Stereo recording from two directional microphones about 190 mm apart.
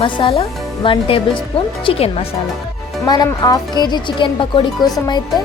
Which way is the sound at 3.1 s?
20° left (ahead or behind).